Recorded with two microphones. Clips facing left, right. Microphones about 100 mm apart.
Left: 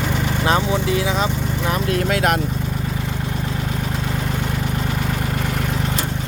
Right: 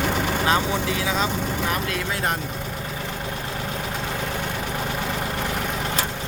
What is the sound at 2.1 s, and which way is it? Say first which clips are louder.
Speech: left 9 dB; 70° left (ahead or behind).